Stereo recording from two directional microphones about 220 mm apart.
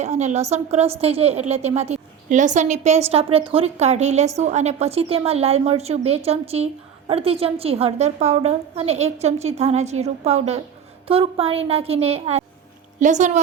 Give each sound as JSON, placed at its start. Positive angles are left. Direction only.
{"t": 0.0, "sound": "a woman's voice", "side_deg": -30}